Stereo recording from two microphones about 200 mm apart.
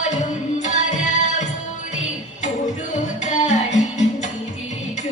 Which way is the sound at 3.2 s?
35° left (ahead or behind).